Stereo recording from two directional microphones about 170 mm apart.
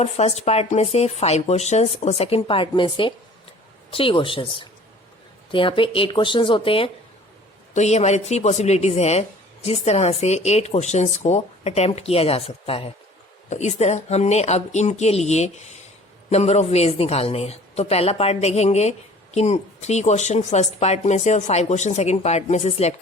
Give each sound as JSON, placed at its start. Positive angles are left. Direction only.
{"t": 0.0, "sound": "a woman's voice", "side_deg": 40}